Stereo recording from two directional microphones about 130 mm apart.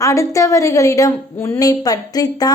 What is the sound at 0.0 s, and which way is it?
A woman's voice, 25° left (ahead or behind).